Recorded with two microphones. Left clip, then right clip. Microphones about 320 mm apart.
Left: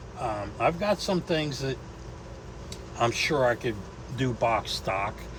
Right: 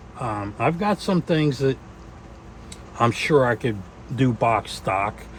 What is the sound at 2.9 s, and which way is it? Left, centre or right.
Speech, centre.